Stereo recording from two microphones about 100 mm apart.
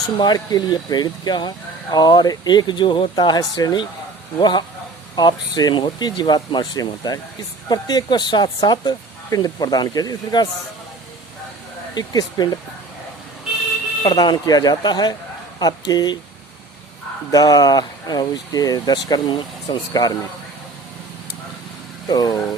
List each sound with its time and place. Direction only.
0.2 s speech: 40° left (ahead or behind)
11.9 s speech: 40° left (ahead or behind)
14.0 s speech: 45° left (ahead or behind)
17.3 s speech: 40° left (ahead or behind)
22.0 s speech: 40° left (ahead or behind)